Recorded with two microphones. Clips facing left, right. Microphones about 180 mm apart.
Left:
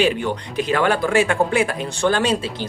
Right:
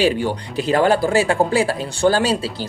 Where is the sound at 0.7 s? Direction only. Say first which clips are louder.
Right 3 dB; 40° right (ahead or behind).